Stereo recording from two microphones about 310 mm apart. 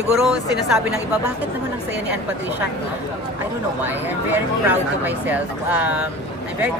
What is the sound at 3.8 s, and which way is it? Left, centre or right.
Speech, centre.